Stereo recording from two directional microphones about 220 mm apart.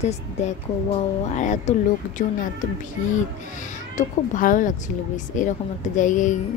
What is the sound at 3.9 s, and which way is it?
Speech, 35° left (ahead or behind).